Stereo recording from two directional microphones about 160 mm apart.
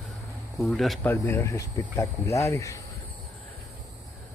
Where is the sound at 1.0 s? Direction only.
15° left (ahead or behind).